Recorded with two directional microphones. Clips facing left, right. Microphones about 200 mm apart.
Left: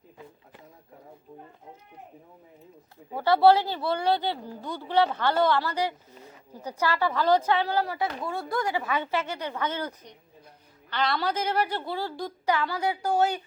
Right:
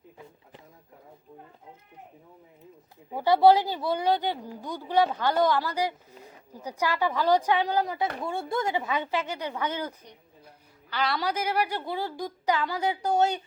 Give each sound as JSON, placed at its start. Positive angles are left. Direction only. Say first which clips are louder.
{"t": 3.1, "sound": "a woman's voice", "louder": "even", "side_deg": -15}